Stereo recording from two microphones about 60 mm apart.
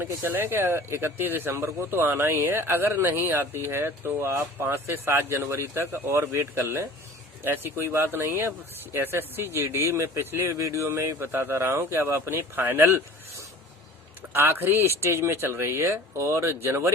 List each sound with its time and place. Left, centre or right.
0.2 s speech: right
11.2 s speech: right
11.5 s speech: right
14.2 s speech: right